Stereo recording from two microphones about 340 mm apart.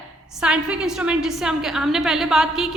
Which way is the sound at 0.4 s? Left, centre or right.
Centre.